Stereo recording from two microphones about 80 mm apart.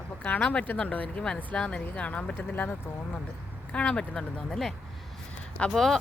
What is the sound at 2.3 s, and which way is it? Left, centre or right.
Speech, left.